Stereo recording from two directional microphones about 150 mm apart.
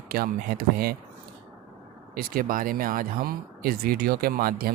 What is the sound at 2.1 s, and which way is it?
Speech, 75° right (ahead or behind).